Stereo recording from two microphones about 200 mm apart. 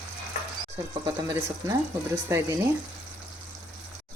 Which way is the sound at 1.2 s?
15° right (ahead or behind).